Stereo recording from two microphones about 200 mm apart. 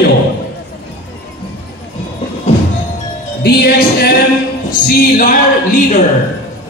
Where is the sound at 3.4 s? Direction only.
50° left (ahead or behind).